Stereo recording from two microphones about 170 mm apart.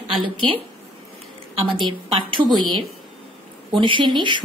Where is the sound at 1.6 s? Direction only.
30° right (ahead or behind).